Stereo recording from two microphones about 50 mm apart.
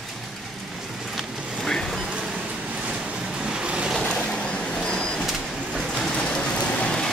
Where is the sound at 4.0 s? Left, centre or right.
Centre.